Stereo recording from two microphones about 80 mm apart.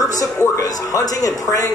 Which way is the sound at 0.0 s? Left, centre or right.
Left.